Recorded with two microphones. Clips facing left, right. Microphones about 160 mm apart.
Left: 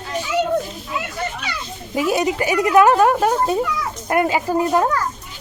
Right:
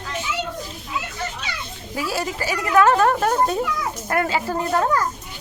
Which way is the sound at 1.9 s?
20° left (ahead or behind).